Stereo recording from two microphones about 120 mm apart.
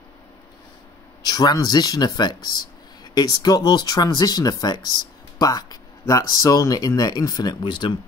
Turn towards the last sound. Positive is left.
turn(degrees=45)  # may be behind; listen again after turning